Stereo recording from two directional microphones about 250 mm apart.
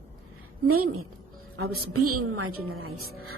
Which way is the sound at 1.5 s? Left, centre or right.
Right.